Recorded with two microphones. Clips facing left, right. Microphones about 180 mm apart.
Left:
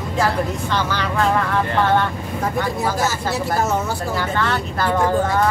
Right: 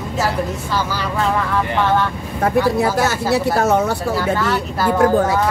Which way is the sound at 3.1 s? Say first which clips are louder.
Right 5 dB; 65° right (ahead or behind).